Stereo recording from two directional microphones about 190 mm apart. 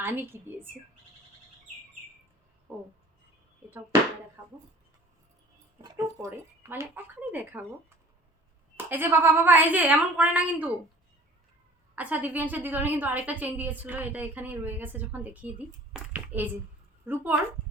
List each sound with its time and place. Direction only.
0.0 s a woman's voice: 10° right (ahead or behind)
5.8 s a woman's voice: 15° right (ahead or behind)
8.7 s a woman's voice: 10° right (ahead or behind)
11.9 s a woman's voice: 10° right (ahead or behind)